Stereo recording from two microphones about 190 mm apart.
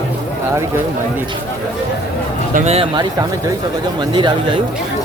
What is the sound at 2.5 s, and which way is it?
Speech, 35° right (ahead or behind).